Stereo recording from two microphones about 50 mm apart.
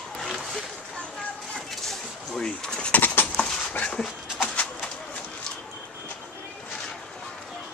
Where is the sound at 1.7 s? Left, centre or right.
Centre.